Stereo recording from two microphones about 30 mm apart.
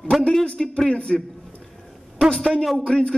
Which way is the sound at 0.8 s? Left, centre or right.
Left.